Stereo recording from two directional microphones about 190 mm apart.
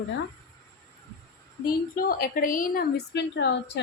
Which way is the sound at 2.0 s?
50° left (ahead or behind).